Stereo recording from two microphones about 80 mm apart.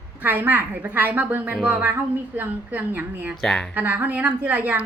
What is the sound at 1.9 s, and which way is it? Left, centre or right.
A woman's voice, right.